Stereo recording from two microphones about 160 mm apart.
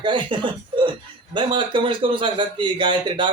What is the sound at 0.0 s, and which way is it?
A man's voice, 30° right (ahead or behind).